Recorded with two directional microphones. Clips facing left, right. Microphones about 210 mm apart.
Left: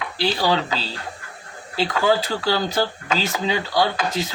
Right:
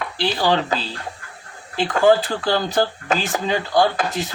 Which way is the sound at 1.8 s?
50° right (ahead or behind).